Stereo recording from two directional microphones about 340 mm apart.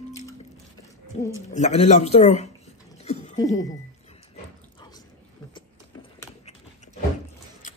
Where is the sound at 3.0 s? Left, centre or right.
Centre.